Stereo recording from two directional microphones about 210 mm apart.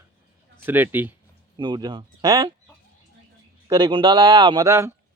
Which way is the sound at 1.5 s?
20° right (ahead or behind).